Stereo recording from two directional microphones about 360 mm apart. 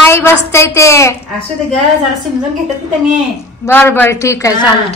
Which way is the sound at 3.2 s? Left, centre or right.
Centre.